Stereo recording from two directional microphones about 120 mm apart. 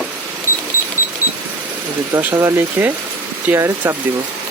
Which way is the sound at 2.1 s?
20° right (ahead or behind).